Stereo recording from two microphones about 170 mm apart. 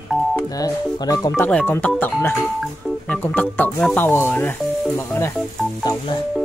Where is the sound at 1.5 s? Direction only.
10° left (ahead or behind).